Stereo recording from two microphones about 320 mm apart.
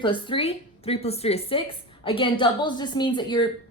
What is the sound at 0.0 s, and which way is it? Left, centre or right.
A woman's voice, centre.